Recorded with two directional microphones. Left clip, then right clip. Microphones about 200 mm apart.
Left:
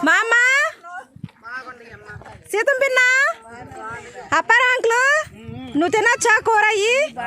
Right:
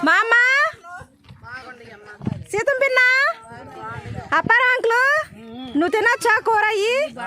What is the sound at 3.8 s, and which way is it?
Speech, 10° right (ahead or behind).